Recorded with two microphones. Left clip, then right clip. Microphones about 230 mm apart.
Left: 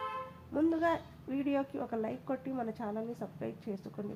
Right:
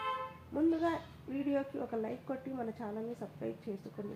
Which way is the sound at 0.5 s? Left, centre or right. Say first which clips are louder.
Left 2 dB; left.